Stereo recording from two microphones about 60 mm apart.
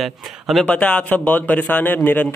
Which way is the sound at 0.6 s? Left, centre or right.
Left.